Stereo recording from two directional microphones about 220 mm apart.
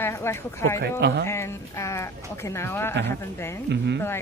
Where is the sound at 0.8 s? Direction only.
50° right (ahead or behind).